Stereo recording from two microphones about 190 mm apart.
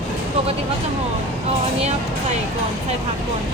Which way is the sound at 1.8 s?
35° right (ahead or behind).